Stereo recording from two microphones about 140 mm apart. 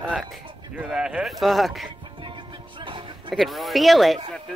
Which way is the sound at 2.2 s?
35° right (ahead or behind).